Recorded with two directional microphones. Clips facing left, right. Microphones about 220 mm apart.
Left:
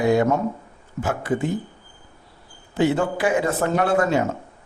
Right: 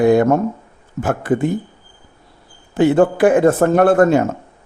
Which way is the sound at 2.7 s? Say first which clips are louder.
Right 7 dB; 55° right (ahead or behind).